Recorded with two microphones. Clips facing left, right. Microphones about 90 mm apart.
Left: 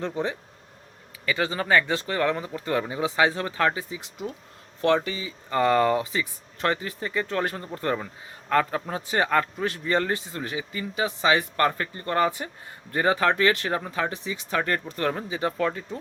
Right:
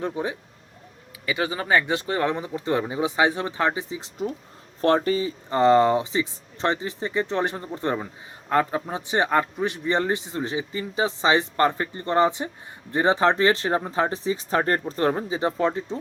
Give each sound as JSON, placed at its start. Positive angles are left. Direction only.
{"t": 0.0, "sound": "speech", "side_deg": -15}
{"t": 5.5, "sound": "speech", "side_deg": -25}